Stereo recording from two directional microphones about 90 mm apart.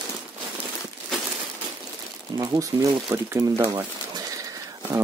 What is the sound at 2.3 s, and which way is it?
Speech, 45° right (ahead or behind).